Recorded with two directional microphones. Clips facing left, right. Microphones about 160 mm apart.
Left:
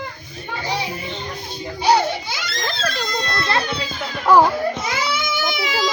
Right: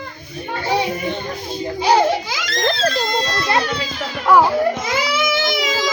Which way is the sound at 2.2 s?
90° right.